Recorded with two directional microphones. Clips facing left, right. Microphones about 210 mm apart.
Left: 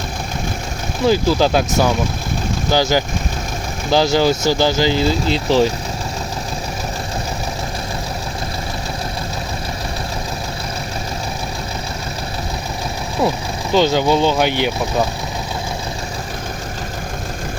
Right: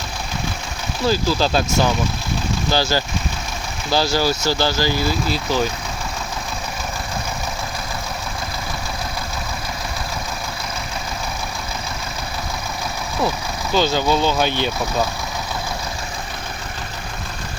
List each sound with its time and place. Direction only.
1.0 s speech: 20° left (ahead or behind)
13.7 s speech: 15° left (ahead or behind)